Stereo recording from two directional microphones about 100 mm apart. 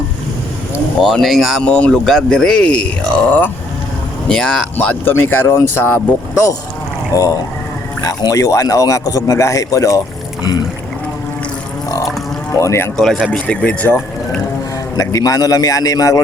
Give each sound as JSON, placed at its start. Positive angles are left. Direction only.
{"t": 0.9, "sound": "speech", "side_deg": 5}
{"t": 1.6, "sound": "speech", "side_deg": 10}
{"t": 4.3, "sound": "speech", "side_deg": 10}
{"t": 7.1, "sound": "a man's voice", "side_deg": 35}
{"t": 12.5, "sound": "speech", "side_deg": 30}
{"t": 13.0, "sound": "speech", "side_deg": 5}
{"t": 14.9, "sound": "a man's voice", "side_deg": 35}